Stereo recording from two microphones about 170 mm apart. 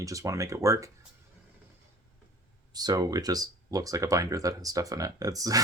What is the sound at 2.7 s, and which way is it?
Speech, 25° right (ahead or behind).